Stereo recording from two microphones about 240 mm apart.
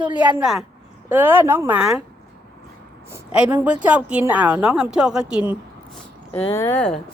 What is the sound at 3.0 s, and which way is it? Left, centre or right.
A woman's voice, centre.